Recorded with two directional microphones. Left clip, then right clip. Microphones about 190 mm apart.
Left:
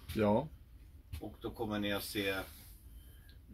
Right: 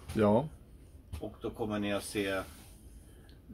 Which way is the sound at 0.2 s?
5° right (ahead or behind).